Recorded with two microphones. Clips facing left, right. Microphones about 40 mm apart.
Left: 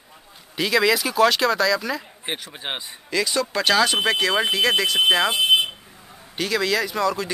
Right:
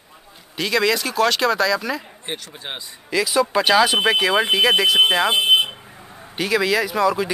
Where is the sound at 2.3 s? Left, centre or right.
Centre.